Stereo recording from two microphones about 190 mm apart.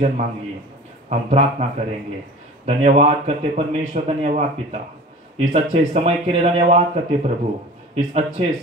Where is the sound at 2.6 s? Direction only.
35° right (ahead or behind).